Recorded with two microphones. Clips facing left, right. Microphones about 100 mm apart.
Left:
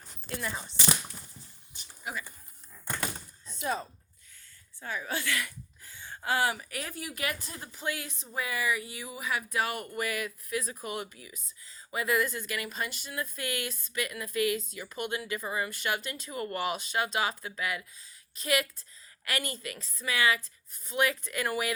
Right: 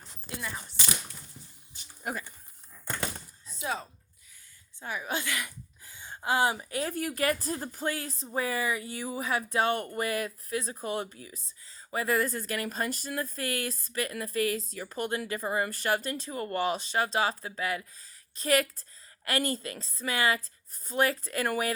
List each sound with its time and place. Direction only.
2.0 s speech: 50° right (ahead or behind)
3.4 s a sound: centre (ahead or behind)
4.8 s a woman's voice: 20° right (ahead or behind)
6.9 s speech: 45° right (ahead or behind)